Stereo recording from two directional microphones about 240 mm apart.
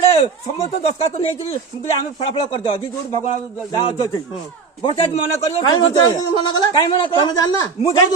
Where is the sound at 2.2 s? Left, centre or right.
Left.